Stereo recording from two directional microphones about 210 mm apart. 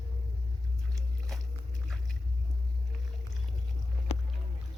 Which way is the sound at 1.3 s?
Centre (ahead or behind).